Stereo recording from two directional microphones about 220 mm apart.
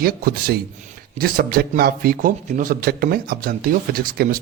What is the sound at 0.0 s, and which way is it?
A man's voice, 40° right (ahead or behind).